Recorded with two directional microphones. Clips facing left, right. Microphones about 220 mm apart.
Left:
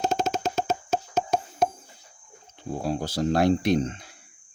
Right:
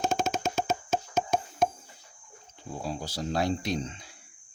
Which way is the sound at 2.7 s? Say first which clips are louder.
Left 7 dB; 60° left (ahead or behind).